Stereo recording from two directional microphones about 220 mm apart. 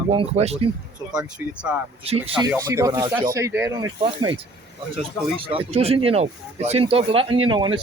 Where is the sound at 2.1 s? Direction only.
25° right (ahead or behind).